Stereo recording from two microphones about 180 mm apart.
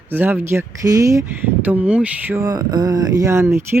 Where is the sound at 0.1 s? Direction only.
10° right (ahead or behind).